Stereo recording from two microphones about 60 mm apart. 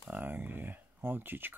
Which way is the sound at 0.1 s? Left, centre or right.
Right.